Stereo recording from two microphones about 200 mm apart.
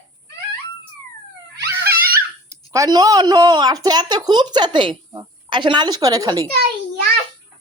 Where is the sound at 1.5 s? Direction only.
55° right (ahead or behind).